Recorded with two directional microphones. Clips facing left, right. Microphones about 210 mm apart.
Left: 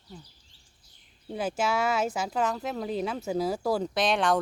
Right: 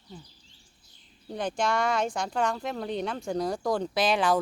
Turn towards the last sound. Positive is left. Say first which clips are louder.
# right 1 dB
turn(degrees=0)  # may be behind; listen again after turning